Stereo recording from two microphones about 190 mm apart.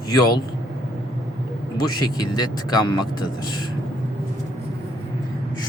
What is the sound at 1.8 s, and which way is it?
Speech, 20° left (ahead or behind).